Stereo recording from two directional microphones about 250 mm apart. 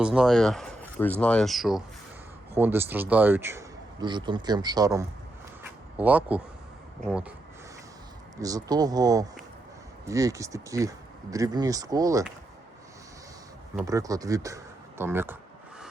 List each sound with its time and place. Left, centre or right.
0.0 s speech: centre
8.4 s speech: centre
13.7 s speech: centre